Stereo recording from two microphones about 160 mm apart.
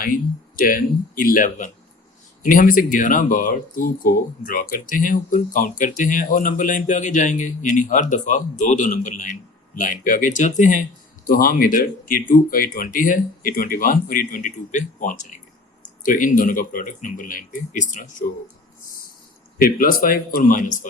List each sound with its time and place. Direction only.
0.0 s a man's voice: 60° left (ahead or behind)
11.3 s speech: 65° left (ahead or behind)
19.5 s speech: 65° left (ahead or behind)